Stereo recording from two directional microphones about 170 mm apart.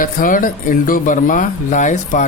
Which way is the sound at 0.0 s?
50° left (ahead or behind).